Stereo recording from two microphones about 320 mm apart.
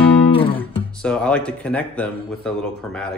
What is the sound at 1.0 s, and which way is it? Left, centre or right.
Speech, centre.